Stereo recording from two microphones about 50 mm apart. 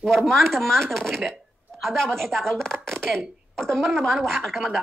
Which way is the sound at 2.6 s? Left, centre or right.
Centre.